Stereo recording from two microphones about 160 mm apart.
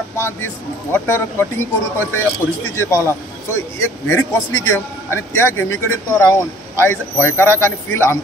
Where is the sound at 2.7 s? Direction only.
15° left (ahead or behind).